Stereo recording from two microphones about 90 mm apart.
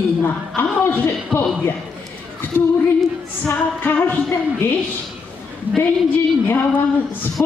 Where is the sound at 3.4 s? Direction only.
20° left (ahead or behind).